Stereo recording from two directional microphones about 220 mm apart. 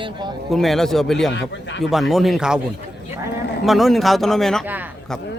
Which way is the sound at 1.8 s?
Centre (ahead or behind).